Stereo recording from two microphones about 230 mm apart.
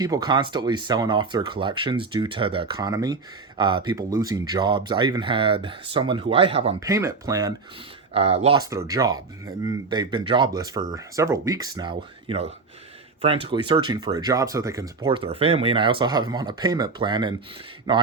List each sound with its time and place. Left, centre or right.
0.0 s speech: centre
6.7 s speech: centre
8.1 s speech: right
8.7 s speech: centre